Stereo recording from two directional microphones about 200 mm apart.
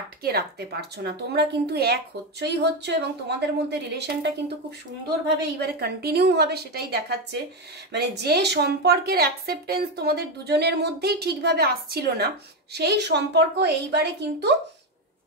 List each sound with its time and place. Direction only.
0.2 s a woman's voice: 50° right (ahead or behind)